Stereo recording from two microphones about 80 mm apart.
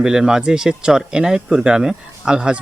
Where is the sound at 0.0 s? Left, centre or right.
Centre.